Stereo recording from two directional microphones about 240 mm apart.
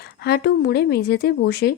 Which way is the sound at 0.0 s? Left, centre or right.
Left.